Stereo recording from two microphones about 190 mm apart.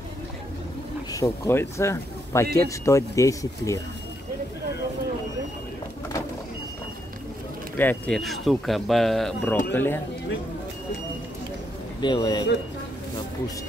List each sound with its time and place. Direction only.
1.1 s speech: 15° left (ahead or behind)
7.7 s speech: 10° left (ahead or behind)
9.7 s speech: 10° left (ahead or behind)
12.0 s speech: 25° left (ahead or behind)